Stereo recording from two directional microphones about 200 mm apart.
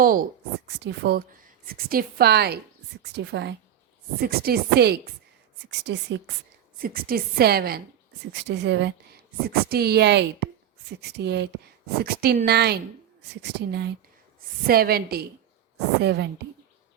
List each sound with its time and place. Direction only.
0.0 s a woman's voice: 45° right (ahead or behind); by 6.3 s 60° right (ahead or behind)
6.7 s a woman's voice: 45° right (ahead or behind)
8.3 s speech: 60° right (ahead or behind)
9.5 s a woman's voice: 50° right (ahead or behind)